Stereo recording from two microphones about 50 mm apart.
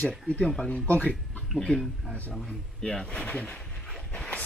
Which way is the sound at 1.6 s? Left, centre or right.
Centre.